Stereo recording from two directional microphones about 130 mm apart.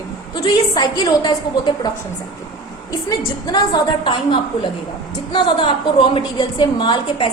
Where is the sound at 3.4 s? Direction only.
35° left (ahead or behind).